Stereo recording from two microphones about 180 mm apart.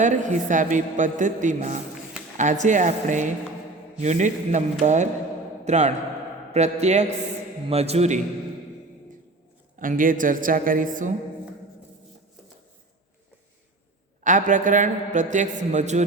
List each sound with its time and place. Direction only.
0.0 s a woman's voice: 45° right (ahead or behind)
9.7 s a woman's voice: 50° right (ahead or behind)
14.3 s a woman's voice: 45° right (ahead or behind)